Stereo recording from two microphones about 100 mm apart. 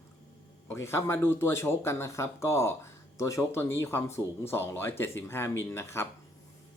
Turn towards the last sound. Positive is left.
turn(degrees=25)  # may be behind; listen again after turning